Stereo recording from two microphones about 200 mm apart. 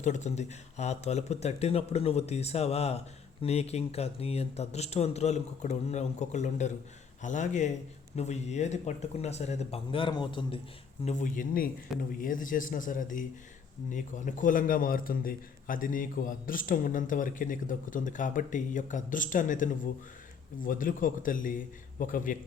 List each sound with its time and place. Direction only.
0.0 s a man's voice: 35° left (ahead or behind)
11.0 s a man's voice: 40° left (ahead or behind)